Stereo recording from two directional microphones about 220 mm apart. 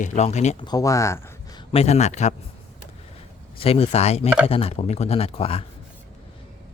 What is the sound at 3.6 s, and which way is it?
Speech, 25° left (ahead or behind).